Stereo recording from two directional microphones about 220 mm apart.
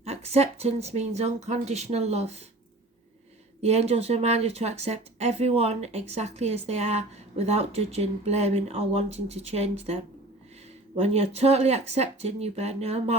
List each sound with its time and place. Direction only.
0.0 s speech: 30° right (ahead or behind)
3.6 s speech: 30° right (ahead or behind)
11.0 s speech: 30° right (ahead or behind)